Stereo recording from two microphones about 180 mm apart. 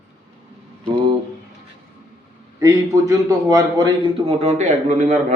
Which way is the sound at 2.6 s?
20° right (ahead or behind).